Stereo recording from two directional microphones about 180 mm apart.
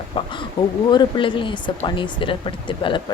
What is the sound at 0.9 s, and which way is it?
Speech, 25° left (ahead or behind).